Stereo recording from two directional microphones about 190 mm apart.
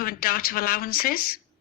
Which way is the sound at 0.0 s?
50° left (ahead or behind).